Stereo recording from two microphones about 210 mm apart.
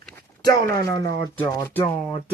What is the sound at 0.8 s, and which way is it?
Speech, 15° left (ahead or behind).